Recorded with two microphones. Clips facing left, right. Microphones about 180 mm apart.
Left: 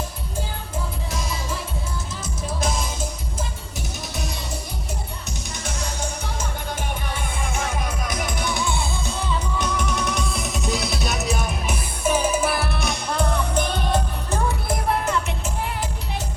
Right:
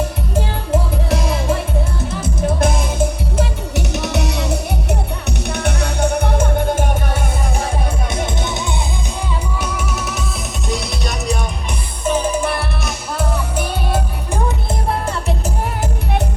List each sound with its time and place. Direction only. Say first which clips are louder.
0.3 s music: right 11 dB; 70° right (ahead or behind); by 7.2 s 50° right (ahead or behind)
8.1 s music: right 4 dB; 25° right (ahead or behind)
9.6 s music: right 1 dB; 10° right (ahead or behind)
14.7 s music: right 1 dB; 35° right (ahead or behind)